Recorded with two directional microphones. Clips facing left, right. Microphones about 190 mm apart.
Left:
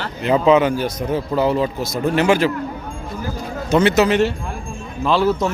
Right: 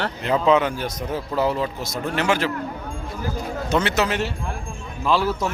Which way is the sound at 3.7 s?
10° left (ahead or behind).